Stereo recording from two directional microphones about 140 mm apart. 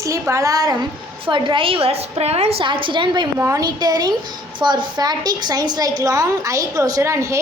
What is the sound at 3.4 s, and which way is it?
A woman's voice, 25° right (ahead or behind).